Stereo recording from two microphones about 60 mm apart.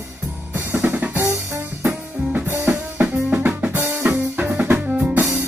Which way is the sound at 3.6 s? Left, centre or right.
Right.